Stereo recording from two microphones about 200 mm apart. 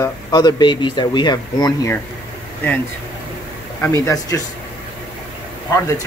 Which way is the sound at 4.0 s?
15° left (ahead or behind).